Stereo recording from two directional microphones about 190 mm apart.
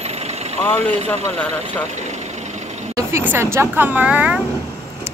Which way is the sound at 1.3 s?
5° left (ahead or behind).